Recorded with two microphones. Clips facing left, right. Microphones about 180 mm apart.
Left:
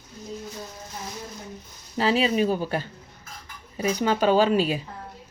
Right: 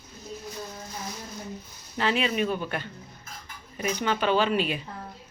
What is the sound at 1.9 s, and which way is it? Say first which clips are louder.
A woman's voice: left 4 dB; 35° left (ahead or behind).